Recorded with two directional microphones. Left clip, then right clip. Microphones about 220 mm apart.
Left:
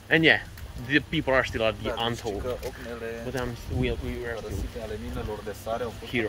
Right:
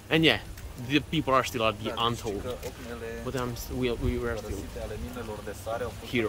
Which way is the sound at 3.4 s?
5° right (ahead or behind).